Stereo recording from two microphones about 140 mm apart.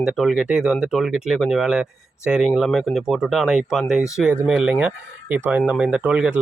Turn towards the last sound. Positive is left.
turn(degrees=-10)  # may be behind; listen again after turning